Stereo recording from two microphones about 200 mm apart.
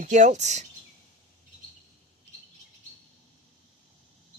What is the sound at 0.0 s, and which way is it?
Speech, 40° right (ahead or behind).